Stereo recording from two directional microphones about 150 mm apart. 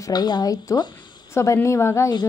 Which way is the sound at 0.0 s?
25° left (ahead or behind).